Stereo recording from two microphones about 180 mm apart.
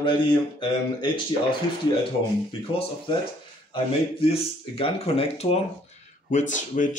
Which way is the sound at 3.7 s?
30° left (ahead or behind).